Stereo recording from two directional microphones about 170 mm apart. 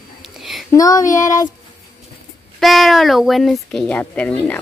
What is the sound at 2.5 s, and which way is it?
Speech, centre (ahead or behind).